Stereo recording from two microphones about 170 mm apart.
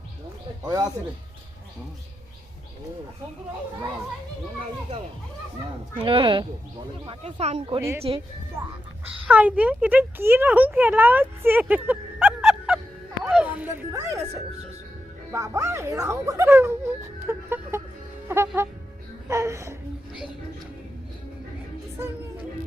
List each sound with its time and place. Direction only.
0.6 s speech: 20° right (ahead or behind)
6.0 s speech: 30° right (ahead or behind)
7.8 s speech: 15° right (ahead or behind)
12.4 s music: 5° right (ahead or behind)
13.2 s speech: 5° right (ahead or behind)